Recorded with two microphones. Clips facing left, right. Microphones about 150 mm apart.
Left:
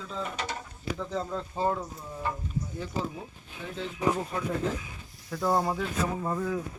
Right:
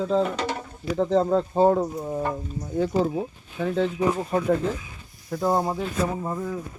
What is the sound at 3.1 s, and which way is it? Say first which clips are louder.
Speech: right 13 dB; 75° right (ahead or behind).